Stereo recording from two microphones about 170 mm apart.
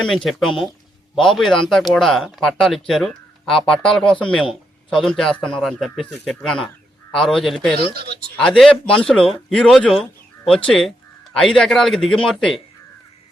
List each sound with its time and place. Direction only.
0.0 s speech: 5° left (ahead or behind)
7.9 s speech: 65° right (ahead or behind)
8.4 s speech: 5° left (ahead or behind)